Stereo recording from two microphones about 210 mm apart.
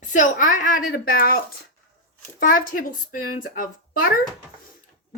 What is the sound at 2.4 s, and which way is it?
A woman's voice, 40° left (ahead or behind).